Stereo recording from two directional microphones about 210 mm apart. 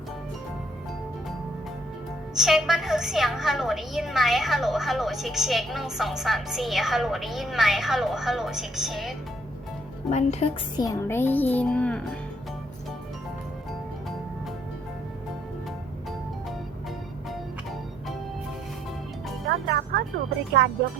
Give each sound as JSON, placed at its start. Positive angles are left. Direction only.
{"t": 2.3, "sound": "a woman's voice", "side_deg": 0}
{"t": 10.1, "sound": "a woman's voice", "side_deg": 30}
{"t": 10.8, "sound": "a child's voice", "side_deg": 15}
{"t": 19.6, "sound": "music", "side_deg": -50}